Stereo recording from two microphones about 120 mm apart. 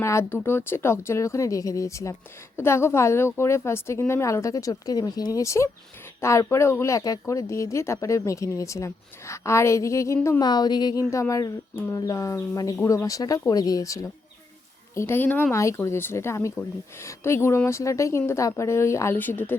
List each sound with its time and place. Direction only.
0.0 s speech: 25° left (ahead or behind)
10.4 s a woman's voice: 35° left (ahead or behind); by 19.5 s 15° left (ahead or behind)